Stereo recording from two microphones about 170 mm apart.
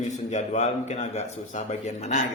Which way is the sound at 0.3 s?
45° left (ahead or behind).